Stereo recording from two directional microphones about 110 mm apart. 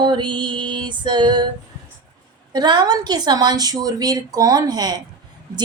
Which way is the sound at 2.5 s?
40° right (ahead or behind).